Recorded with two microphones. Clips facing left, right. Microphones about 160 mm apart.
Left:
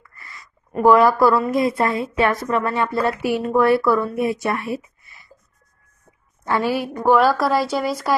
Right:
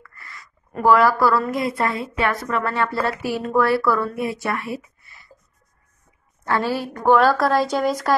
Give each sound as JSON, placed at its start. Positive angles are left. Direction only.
{"t": 0.2, "sound": "a woman's voice", "side_deg": 20}
{"t": 6.4, "sound": "a woman's voice", "side_deg": 15}